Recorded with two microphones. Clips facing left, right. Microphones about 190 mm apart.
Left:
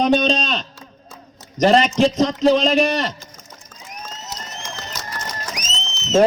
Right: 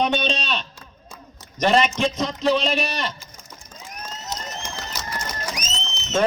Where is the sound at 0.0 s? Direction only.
40° left (ahead or behind).